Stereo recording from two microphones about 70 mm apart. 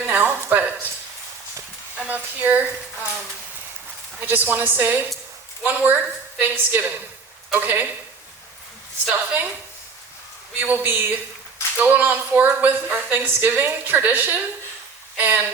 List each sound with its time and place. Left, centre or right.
0.0 s a sound: right
2.0 s a woman's voice: right
4.2 s a woman's voice: right
9.0 s a woman's voice: right
10.6 s a woman's voice: right